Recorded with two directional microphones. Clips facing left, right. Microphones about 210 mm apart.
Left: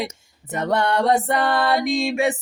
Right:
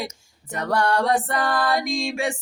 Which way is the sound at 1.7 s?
Centre (ahead or behind).